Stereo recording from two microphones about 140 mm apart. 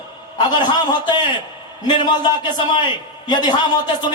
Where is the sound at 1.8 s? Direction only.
30° left (ahead or behind).